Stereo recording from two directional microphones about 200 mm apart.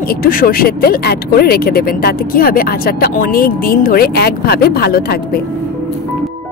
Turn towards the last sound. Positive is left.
turn(degrees=50)  # may be behind; listen again after turning